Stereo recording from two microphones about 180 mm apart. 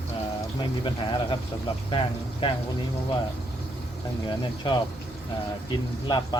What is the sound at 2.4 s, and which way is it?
Speech, 30° left (ahead or behind).